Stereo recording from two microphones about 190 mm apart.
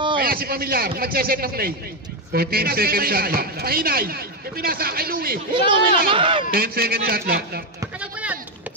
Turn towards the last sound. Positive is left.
turn(degrees=-50)  # may be behind; listen again after turning